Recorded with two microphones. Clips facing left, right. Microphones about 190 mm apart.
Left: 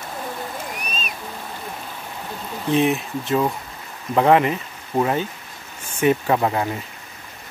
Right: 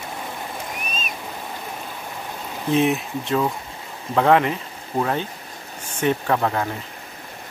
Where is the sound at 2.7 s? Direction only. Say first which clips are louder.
Even; centre (ahead or behind).